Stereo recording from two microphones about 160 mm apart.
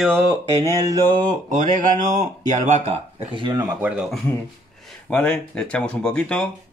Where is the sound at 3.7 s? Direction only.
10° right (ahead or behind).